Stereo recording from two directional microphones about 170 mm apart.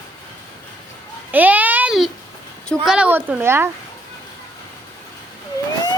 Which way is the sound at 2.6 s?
5° right (ahead or behind).